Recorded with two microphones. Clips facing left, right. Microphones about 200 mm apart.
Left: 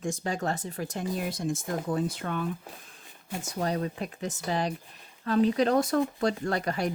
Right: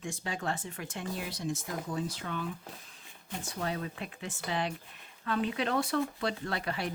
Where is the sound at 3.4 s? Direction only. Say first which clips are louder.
Left 6 dB; 40° left (ahead or behind).